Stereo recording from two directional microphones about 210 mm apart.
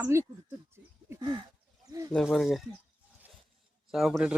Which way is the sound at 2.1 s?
Centre (ahead or behind).